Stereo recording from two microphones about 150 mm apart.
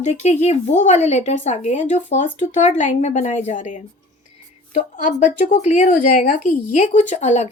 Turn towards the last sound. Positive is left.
turn(degrees=50)  # may be behind; listen again after turning